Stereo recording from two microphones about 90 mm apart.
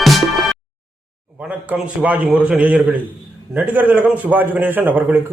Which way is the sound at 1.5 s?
15° right (ahead or behind).